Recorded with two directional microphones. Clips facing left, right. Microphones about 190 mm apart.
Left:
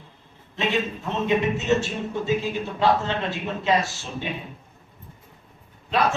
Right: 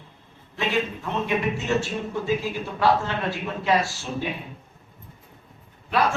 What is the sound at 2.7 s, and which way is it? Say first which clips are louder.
Speech: even; 20° left (ahead or behind).